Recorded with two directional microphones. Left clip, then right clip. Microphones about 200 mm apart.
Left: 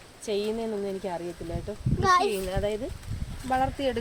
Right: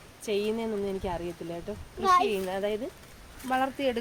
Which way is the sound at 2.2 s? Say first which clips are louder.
Left 1 dB; 5° right (ahead or behind).